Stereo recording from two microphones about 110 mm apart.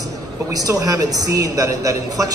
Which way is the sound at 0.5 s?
35° right (ahead or behind).